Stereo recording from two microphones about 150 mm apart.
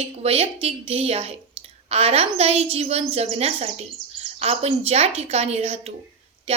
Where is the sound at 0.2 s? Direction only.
40° right (ahead or behind).